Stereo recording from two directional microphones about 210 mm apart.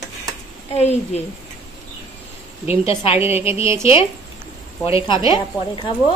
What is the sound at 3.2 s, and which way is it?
Speech, 10° right (ahead or behind).